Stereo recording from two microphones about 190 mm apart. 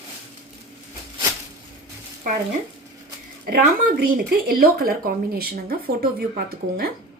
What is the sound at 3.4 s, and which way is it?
Speech, 45° right (ahead or behind).